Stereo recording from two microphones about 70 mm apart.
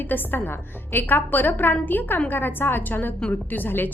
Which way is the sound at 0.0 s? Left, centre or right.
Left.